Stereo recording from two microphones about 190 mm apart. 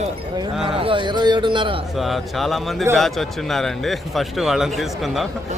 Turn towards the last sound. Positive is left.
turn(degrees=0)  # may be behind; listen again after turning